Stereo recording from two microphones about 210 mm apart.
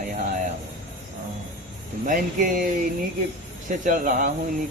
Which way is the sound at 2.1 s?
40° right (ahead or behind).